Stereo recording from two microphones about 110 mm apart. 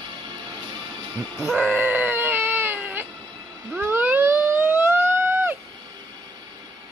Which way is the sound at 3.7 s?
15° right (ahead or behind).